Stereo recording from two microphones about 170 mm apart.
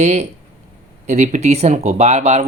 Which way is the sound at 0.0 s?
40° right (ahead or behind).